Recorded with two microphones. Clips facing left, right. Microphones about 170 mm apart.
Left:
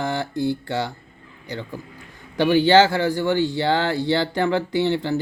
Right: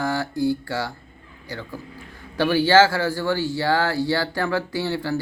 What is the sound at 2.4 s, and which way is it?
Mantra, 20° left (ahead or behind).